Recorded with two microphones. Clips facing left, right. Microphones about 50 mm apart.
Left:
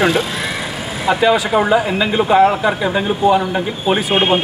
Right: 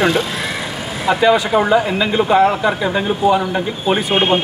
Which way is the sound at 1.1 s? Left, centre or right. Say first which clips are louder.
Even; centre.